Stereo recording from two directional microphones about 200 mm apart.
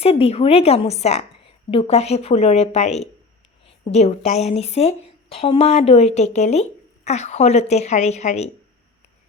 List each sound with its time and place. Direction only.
0.0 s a woman's voice: 30° left (ahead or behind)